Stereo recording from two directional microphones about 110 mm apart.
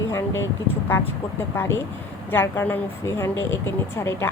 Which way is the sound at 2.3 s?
20° left (ahead or behind).